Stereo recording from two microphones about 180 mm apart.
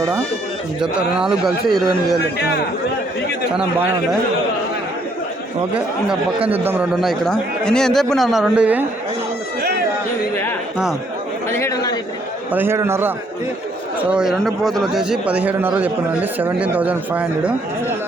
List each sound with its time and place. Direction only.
0.8 s a man's voice: 5° right (ahead or behind)
3.5 s a man's voice: 5° right (ahead or behind)
6.5 s a man's voice: 10° right (ahead or behind)
11.5 s a sound: 15° left (ahead or behind)
12.5 s a man's voice: 10° right (ahead or behind)